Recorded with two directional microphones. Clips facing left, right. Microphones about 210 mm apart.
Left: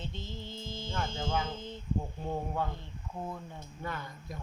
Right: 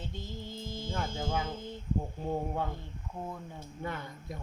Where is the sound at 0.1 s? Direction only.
10° right (ahead or behind).